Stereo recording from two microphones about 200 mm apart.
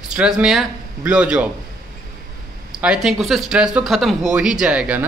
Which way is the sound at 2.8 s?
Centre (ahead or behind).